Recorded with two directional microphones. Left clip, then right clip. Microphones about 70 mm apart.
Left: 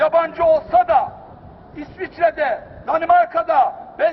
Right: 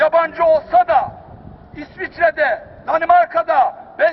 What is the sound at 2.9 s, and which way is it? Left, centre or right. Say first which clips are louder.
Speech: right 2 dB; right.